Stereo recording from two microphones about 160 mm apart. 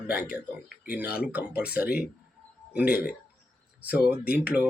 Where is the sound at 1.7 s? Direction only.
75° left (ahead or behind).